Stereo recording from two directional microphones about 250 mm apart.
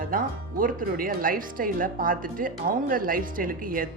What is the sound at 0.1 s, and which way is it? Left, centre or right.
Speech, right.